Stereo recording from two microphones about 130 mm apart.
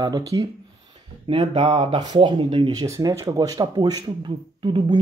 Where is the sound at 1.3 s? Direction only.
45° right (ahead or behind).